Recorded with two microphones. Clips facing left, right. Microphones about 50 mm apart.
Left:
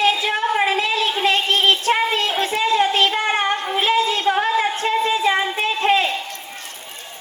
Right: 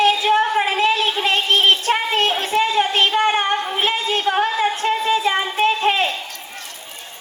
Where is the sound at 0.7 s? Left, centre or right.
Right.